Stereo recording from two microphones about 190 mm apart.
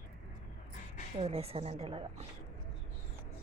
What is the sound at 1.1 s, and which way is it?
A woman's voice, 30° right (ahead or behind).